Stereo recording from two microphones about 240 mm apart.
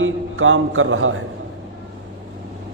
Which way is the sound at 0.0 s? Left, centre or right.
Right.